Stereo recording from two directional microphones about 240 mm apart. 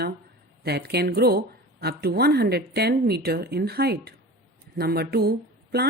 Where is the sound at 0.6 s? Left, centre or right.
Right.